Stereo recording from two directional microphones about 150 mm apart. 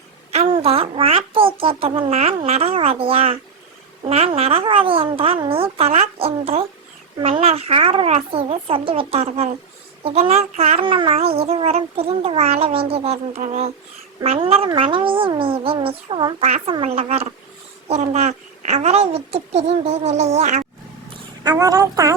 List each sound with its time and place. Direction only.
0.5 s a woman's voice: 40° right (ahead or behind)
21.1 s speech: 25° right (ahead or behind)